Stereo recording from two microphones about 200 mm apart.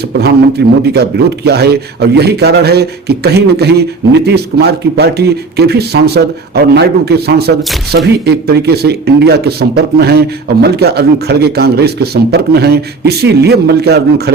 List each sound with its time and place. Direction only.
0.1 s speech: 55° right (ahead or behind)